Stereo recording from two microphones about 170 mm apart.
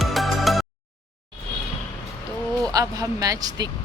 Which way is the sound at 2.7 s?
20° right (ahead or behind).